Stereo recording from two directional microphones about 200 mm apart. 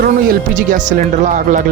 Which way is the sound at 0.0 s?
45° right (ahead or behind).